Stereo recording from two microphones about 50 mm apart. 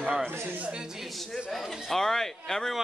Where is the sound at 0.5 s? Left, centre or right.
Right.